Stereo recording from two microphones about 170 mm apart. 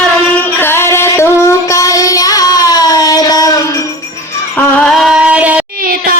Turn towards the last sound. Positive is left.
turn(degrees=-60)  # may be behind; listen again after turning